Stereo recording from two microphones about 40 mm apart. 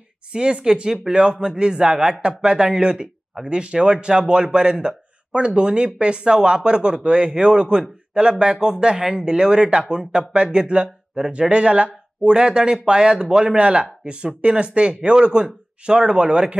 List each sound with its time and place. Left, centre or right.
0.3 s speech: right
13.6 s speech: right